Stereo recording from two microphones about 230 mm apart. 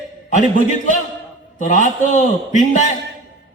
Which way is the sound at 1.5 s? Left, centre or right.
Left.